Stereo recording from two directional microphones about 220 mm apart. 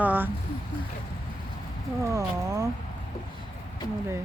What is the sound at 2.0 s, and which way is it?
Speech, 15° right (ahead or behind).